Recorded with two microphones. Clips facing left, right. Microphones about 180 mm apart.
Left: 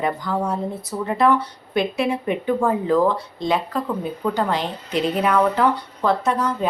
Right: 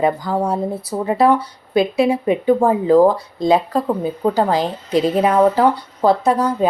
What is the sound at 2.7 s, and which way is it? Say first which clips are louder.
Speech: right 6 dB; 35° right (ahead or behind).